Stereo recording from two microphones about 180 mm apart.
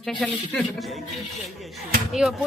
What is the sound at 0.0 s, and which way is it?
Speech, centre (ahead or behind).